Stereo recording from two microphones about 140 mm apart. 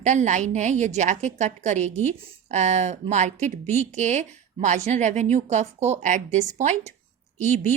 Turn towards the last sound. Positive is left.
turn(degrees=-55)  # may be behind; listen again after turning